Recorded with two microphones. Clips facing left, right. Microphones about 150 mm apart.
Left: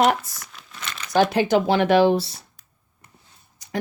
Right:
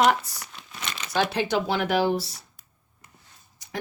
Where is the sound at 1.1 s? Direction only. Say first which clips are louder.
Left 6 dB; 45° left (ahead or behind); by 2.0 s 65° left (ahead or behind).